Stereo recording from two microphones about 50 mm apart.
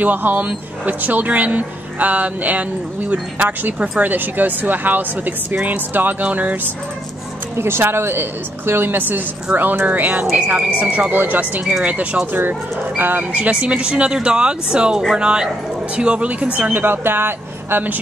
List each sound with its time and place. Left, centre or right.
0.0 s speech: right
7.5 s a woman's voice: right
11.8 s speech: right
12.3 s speech: right
16.7 s a woman's voice: right